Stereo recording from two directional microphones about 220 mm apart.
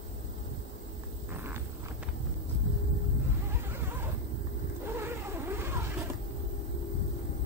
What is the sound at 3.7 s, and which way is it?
Neigh, 10° right (ahead or behind).